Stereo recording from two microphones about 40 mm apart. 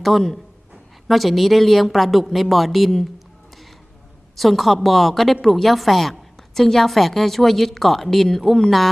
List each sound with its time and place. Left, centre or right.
0.0 s a woman's voice: centre
4.4 s a woman's voice: centre